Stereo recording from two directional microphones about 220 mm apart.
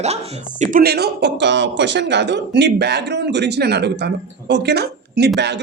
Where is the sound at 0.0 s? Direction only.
30° right (ahead or behind).